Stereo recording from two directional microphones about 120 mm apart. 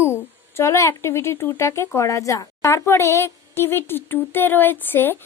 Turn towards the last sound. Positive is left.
turn(degrees=15)  # may be behind; listen again after turning